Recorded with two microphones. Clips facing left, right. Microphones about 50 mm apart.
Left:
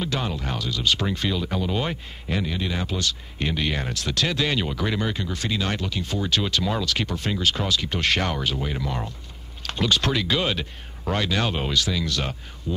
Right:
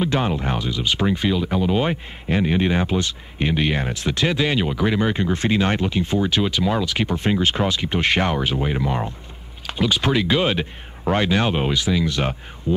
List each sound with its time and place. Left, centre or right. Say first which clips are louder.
0.0 s speech: right 6 dB; right
5.1 s speech: right 8 dB; right
9.7 s speech: right 3 dB; centre
12.7 s a sound: right 8 dB; right